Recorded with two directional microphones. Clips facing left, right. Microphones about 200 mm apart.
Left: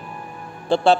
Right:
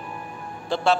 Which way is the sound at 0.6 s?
30° left (ahead or behind).